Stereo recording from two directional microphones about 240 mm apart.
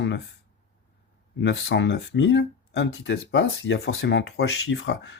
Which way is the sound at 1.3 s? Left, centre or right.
Left.